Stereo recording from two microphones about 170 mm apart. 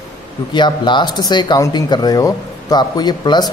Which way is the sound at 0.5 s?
25° left (ahead or behind).